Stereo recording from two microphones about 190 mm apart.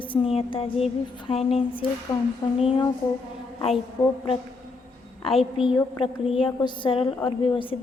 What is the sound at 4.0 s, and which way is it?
Speech, 15° left (ahead or behind).